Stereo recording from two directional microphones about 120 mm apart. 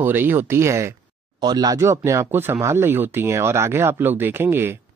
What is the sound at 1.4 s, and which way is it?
Speech, 35° right (ahead or behind).